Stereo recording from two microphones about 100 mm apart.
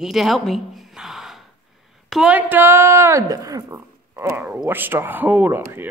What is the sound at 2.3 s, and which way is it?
Speech, 15° right (ahead or behind).